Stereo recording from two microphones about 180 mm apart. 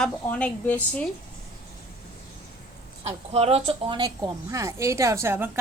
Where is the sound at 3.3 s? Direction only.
35° right (ahead or behind); by 5.5 s 15° right (ahead or behind).